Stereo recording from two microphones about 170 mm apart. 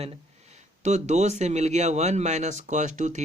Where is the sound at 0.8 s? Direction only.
45° right (ahead or behind).